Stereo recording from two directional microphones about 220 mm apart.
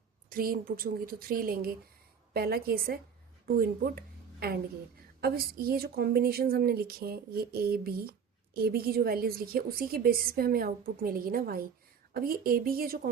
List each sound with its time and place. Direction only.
0.3 s a woman's voice: 40° right (ahead or behind)